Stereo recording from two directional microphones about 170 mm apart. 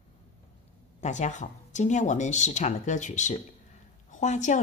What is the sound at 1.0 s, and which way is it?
A woman's voice, 45° left (ahead or behind).